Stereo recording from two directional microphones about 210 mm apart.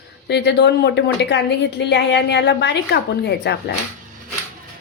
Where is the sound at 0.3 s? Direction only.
55° left (ahead or behind).